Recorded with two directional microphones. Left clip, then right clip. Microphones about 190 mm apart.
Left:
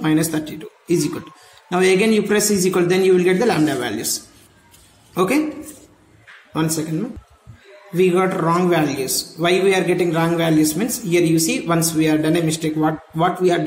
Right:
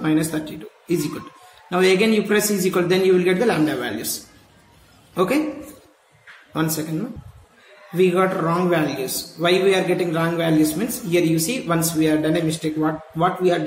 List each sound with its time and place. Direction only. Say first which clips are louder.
0.0 s a man's voice: left 2 dB; 30° left (ahead or behind)
5.1 s a man's voice: left 2 dB; 30° left (ahead or behind)
7.9 s a man's voice: left 1 dB; 25° left (ahead or behind)